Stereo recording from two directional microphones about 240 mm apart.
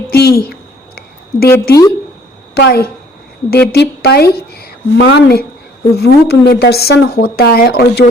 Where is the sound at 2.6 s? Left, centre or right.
Left.